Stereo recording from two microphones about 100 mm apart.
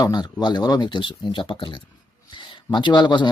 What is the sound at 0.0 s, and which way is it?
Speech, 45° left (ahead or behind).